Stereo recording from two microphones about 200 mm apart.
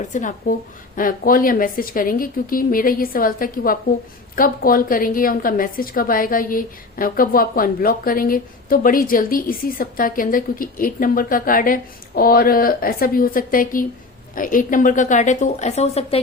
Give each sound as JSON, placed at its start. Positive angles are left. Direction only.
{"t": 0.1, "sound": "a woman's voice", "side_deg": 40}